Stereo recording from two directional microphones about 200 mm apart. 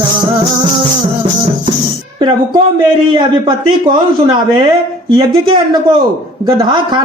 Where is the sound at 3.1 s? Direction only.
25° right (ahead or behind).